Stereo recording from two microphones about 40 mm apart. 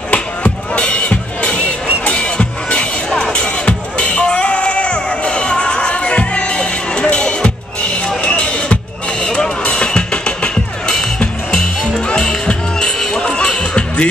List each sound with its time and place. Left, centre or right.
0.7 s music: left